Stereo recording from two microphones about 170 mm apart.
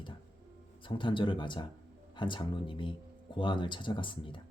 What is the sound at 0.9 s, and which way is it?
Speech, 30° left (ahead or behind).